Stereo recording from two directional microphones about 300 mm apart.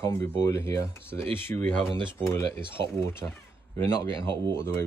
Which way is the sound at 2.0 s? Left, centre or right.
Centre.